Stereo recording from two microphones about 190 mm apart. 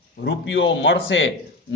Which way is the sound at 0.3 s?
80° left.